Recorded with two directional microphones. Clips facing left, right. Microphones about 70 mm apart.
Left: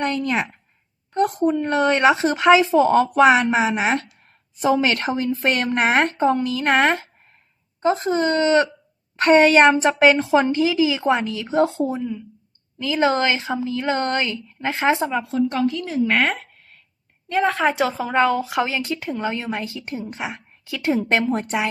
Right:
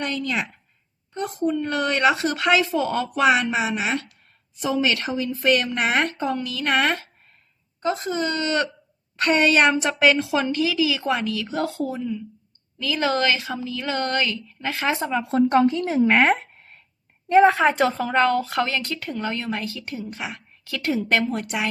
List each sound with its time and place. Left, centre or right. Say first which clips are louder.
0.0 s speech: left 4 dB; left
1.1 s a child's voice: left 6 dB; left
1.5 s speech: left 4 dB; left
15.3 s speech: right 7 dB; right
16.0 s a sound: right 3 dB; centre
17.2 s a woman's voice: right 6 dB; centre
17.5 s speech: right 1 dB; centre; by 21.4 s left